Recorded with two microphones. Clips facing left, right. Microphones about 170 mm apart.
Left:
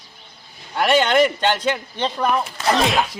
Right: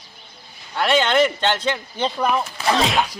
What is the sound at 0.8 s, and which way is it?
Speech, 10° left (ahead or behind).